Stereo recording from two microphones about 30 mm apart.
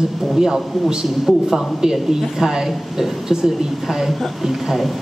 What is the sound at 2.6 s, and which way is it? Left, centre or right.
A woman's voice, centre.